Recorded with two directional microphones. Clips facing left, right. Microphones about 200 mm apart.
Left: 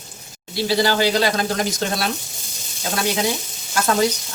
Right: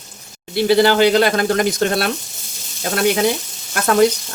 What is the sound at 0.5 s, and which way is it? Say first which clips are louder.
Speech: right 6 dB; 60° right (ahead or behind).